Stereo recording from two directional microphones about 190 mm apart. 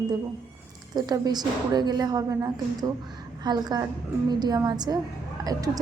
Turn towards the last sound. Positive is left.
turn(degrees=-20)  # may be behind; listen again after turning